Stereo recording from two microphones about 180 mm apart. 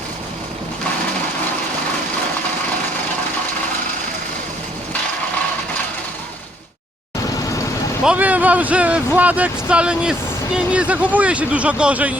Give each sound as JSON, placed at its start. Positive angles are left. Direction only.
{"t": 8.0, "sound": "speech", "side_deg": -5}